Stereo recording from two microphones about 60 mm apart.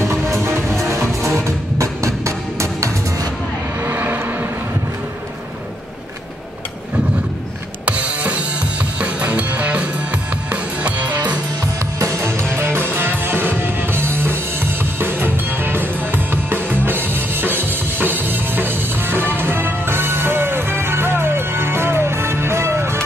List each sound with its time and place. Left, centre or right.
0.3 s music: right
3.8 s vehicle: right
7.8 s music: right
12.0 s music: right